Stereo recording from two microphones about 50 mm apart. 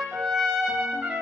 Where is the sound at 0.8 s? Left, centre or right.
Centre.